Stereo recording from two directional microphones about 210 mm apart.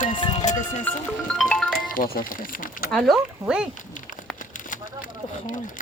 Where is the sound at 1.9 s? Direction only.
40° left (ahead or behind).